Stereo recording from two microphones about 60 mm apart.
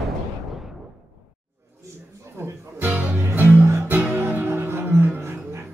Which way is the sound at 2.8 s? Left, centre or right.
Right.